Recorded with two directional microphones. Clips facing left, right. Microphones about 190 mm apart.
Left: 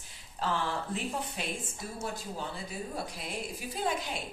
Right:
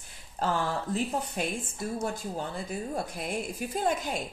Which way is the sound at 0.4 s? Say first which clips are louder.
Right 3 dB; 45° right (ahead or behind).